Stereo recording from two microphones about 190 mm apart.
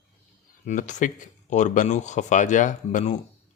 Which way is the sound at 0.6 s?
40° left (ahead or behind).